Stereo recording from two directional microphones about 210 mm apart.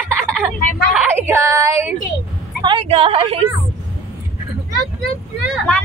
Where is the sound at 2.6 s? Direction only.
25° right (ahead or behind).